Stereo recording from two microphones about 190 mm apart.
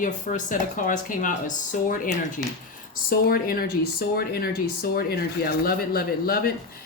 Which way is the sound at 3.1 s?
55° left (ahead or behind).